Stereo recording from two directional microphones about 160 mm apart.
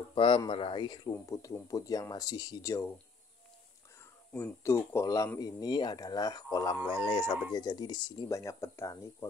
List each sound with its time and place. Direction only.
0.1 s speech: 35° left (ahead or behind)
4.0 s speech: 15° left (ahead or behind)